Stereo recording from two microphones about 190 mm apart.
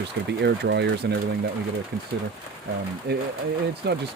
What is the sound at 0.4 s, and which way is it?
Speech, 65° right (ahead or behind).